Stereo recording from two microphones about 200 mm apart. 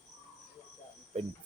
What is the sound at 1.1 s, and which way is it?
Cricket, 30° right (ahead or behind).